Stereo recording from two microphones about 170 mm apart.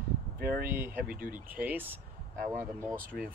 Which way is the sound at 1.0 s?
60° right (ahead or behind).